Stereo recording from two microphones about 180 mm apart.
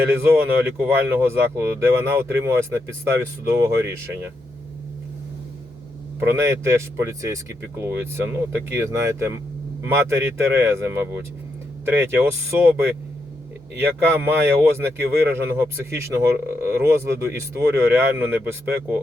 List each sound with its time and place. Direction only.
0.1 s a man's voice: 15° right (ahead or behind)
6.1 s a man's voice: 15° right (ahead or behind)